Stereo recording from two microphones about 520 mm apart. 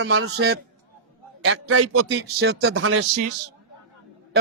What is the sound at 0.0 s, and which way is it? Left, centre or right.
Speech, right.